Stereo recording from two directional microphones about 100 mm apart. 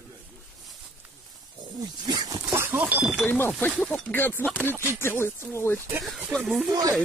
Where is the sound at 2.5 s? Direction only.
20° right (ahead or behind).